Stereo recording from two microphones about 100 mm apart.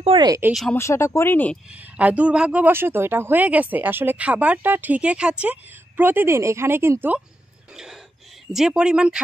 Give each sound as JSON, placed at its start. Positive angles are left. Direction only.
{"t": 0.1, "sound": "speech", "side_deg": -65}
{"t": 0.7, "sound": "speech", "side_deg": 25}
{"t": 1.7, "sound": "speech", "side_deg": -15}
{"t": 7.7, "sound": "a sound", "side_deg": -5}
{"t": 8.5, "sound": "speech", "side_deg": -5}